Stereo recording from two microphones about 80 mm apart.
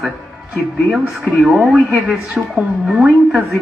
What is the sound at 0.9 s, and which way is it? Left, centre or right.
Speech, centre.